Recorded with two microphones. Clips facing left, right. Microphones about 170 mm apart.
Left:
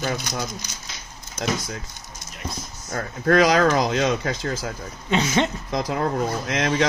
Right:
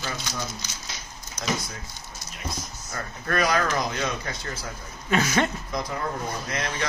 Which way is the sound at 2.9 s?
90° left.